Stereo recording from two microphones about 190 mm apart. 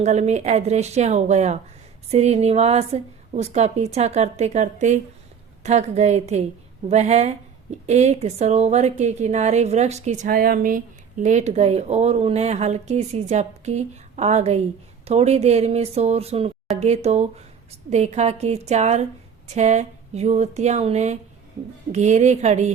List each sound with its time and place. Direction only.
0.0 s a woman's voice: 35° right (ahead or behind)